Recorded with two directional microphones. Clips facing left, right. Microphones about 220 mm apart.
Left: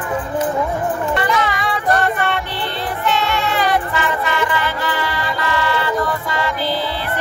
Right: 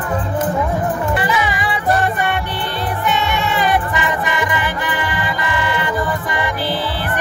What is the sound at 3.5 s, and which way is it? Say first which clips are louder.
Music: right 1 dB; 15° right (ahead or behind).